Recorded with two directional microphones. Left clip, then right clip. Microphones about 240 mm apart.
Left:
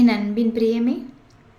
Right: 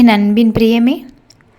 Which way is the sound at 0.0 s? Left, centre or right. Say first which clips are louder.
Right 9 dB; right.